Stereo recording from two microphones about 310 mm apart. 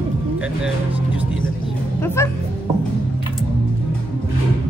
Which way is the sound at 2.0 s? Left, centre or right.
Centre.